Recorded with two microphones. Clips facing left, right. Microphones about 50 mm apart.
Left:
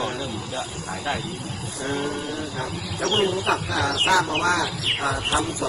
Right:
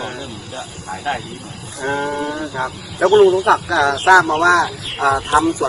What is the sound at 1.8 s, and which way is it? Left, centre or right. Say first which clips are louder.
Speech: right 7 dB; right.